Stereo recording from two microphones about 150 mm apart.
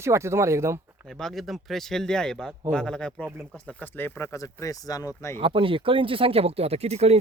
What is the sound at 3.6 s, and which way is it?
Speech, 10° left (ahead or behind).